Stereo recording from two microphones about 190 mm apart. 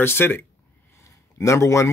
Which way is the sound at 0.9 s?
15° left (ahead or behind).